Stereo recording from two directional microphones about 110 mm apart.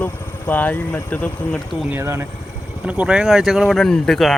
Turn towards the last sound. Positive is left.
turn(degrees=5)  # may be behind; listen again after turning